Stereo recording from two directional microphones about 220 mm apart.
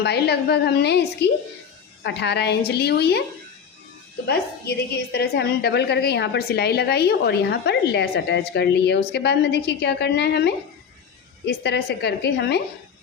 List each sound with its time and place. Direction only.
0.0 s a woman's voice: 50° left (ahead or behind)
4.3 s a woman's voice: 45° left (ahead or behind)